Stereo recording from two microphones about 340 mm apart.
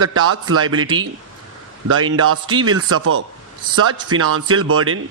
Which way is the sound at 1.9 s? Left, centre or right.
Right.